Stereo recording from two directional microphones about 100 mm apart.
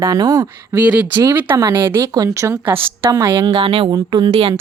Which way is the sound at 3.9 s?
45° right (ahead or behind).